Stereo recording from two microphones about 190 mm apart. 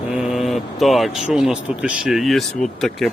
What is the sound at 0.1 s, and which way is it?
Speech, centre (ahead or behind).